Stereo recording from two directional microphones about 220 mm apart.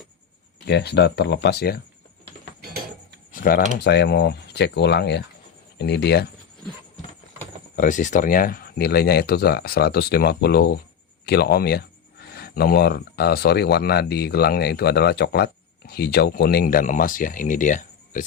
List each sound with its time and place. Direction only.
0.7 s speech: 50° left (ahead or behind)
3.3 s a sound: 40° left (ahead or behind)
3.8 s speech: 50° left (ahead or behind)
7.8 s speech: 35° left (ahead or behind)